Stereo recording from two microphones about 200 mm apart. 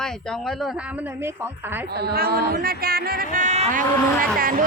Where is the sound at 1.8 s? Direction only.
50° right (ahead or behind).